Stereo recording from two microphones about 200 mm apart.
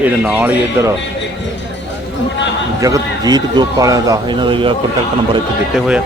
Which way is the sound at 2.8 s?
15° right (ahead or behind).